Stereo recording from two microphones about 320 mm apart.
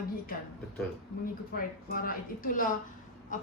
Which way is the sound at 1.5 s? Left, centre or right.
Left.